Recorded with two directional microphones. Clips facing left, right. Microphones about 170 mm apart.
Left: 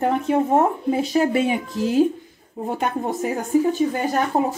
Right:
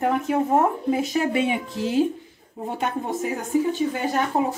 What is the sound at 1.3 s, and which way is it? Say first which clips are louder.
Speech: left 2 dB; 40° left (ahead or behind).